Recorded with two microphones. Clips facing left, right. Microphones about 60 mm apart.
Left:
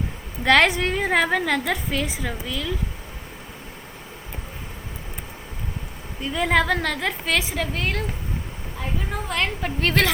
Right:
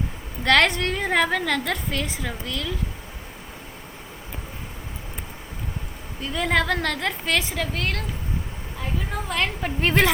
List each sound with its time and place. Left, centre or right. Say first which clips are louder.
0.4 s a woman's voice: left 2 dB; centre
6.2 s a woman's voice: left 2 dB; centre
9.1 s a woman's voice: even; centre
9.8 s a woman's voice: right 1 dB; centre